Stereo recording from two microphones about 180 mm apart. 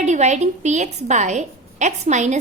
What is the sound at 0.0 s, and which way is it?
A woman's voice, 40° right (ahead or behind).